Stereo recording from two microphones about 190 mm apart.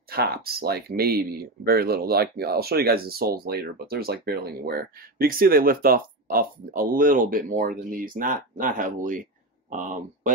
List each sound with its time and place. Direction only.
0.1 s speech: 55° right (ahead or behind)